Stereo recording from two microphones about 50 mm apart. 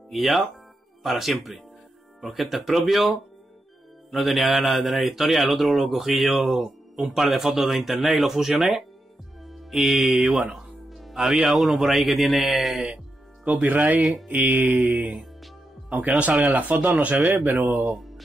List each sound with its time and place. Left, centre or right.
0.1 s speech: centre
9.5 s music: centre
11.4 s speech: centre
13.7 s speech: right
16.2 s speech: right
17.9 s music: centre